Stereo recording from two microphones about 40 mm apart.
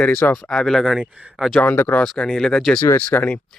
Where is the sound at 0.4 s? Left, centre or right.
Centre.